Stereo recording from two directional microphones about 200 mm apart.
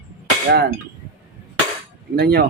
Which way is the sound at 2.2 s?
50° right (ahead or behind).